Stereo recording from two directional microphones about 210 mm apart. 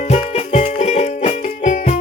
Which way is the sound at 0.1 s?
30° left (ahead or behind).